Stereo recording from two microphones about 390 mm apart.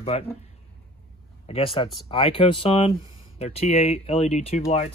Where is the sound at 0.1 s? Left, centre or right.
Centre.